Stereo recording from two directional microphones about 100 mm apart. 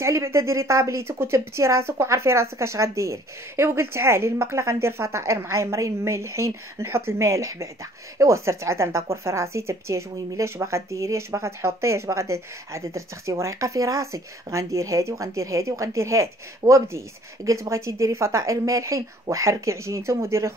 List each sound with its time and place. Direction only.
0.0 s a woman's voice: 30° right (ahead or behind)